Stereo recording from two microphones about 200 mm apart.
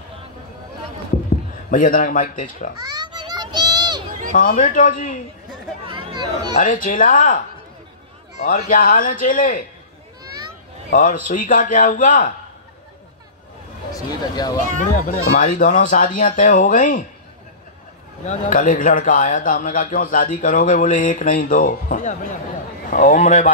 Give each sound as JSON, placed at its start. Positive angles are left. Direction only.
{"t": 1.7, "sound": "speech", "side_deg": 40}
{"t": 2.8, "sound": "children playing", "side_deg": -20}
{"t": 4.4, "sound": "speech", "side_deg": 40}
{"t": 5.9, "sound": "chatter", "side_deg": -20}
{"t": 6.6, "sound": "speech", "side_deg": 40}
{"t": 8.5, "sound": "a man's voice", "side_deg": 45}
{"t": 10.9, "sound": "speech", "side_deg": 40}
{"t": 13.9, "sound": "speech", "side_deg": 20}
{"t": 14.8, "sound": "speech", "side_deg": 40}
{"t": 18.2, "sound": "speech", "side_deg": 40}